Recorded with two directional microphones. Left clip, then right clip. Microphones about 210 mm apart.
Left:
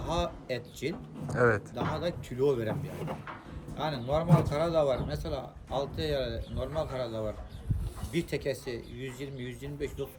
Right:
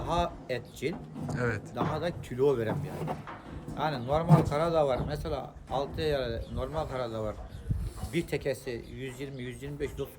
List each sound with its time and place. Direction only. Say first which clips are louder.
0.0 s a man's voice: right 2 dB; centre (ahead or behind)